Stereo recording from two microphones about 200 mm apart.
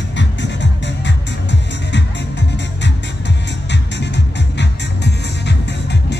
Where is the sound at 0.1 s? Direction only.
65° left (ahead or behind).